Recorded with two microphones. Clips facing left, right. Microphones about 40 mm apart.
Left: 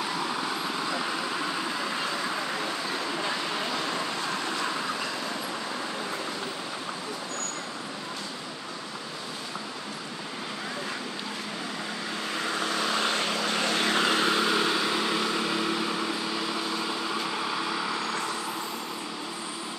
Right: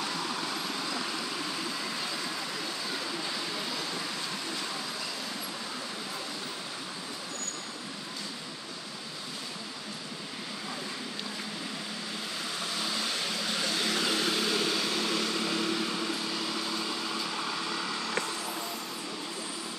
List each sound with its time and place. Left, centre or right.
0.0 s vehicle: centre; by 4.6 s left
12.4 s vehicle: left